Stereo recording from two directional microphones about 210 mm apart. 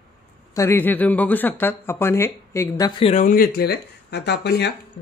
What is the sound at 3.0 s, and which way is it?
Speech, 35° left (ahead or behind).